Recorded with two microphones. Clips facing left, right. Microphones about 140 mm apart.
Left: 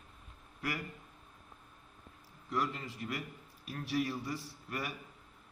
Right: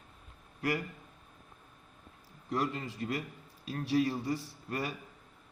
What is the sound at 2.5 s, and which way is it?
A man's voice, 25° right (ahead or behind).